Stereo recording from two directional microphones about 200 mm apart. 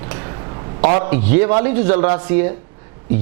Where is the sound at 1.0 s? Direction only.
10° right (ahead or behind).